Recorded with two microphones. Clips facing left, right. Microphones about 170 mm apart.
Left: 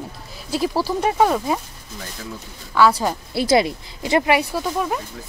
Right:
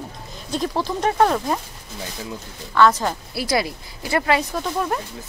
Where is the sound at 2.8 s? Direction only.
10° left (ahead or behind).